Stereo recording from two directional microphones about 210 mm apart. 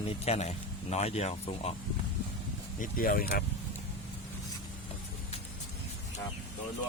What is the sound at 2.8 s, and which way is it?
Speech, 40° left (ahead or behind).